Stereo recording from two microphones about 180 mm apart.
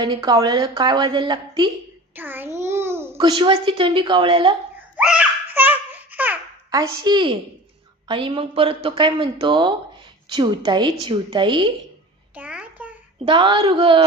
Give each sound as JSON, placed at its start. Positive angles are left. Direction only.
{"t": 0.0, "sound": "speech", "side_deg": -20}
{"t": 2.1, "sound": "a child's voice", "side_deg": -10}
{"t": 2.6, "sound": "babbling", "side_deg": -15}
{"t": 3.2, "sound": "speech", "side_deg": -25}
{"t": 4.9, "sound": "babbling", "side_deg": -5}
{"t": 8.0, "sound": "speech", "side_deg": -25}
{"t": 12.4, "sound": "a sound", "side_deg": -5}
{"t": 13.2, "sound": "speech", "side_deg": -25}